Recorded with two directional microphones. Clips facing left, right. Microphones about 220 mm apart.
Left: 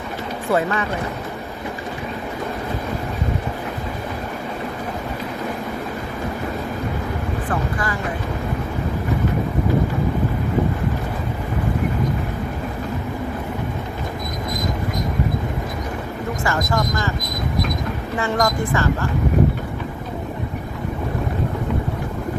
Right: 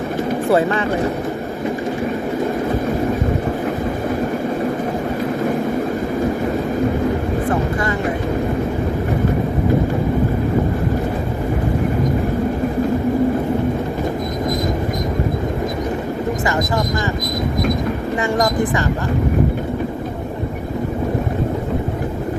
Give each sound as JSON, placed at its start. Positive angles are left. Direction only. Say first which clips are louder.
{"t": 0.5, "sound": "speech", "louder": "right 3 dB", "side_deg": -30}
{"t": 18.2, "sound": "speech", "louder": "right 2 dB", "side_deg": -20}